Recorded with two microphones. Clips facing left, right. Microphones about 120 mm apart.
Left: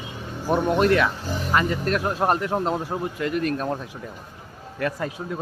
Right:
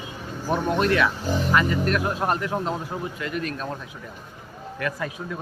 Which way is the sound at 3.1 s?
45° left (ahead or behind).